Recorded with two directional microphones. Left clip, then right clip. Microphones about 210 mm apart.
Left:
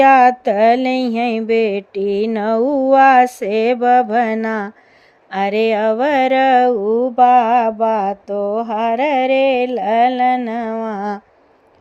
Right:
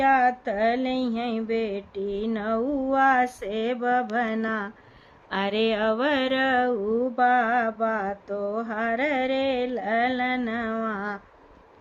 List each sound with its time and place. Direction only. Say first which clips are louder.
0.0 s mantra: left 11 dB; 40° left (ahead or behind)
5.3 s mantra: left 9 dB; 25° left (ahead or behind)